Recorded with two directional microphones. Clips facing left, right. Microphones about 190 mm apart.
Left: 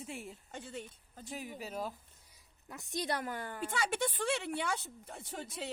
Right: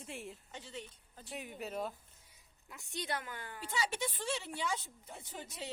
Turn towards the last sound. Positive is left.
turn(degrees=60)  # may be behind; listen again after turning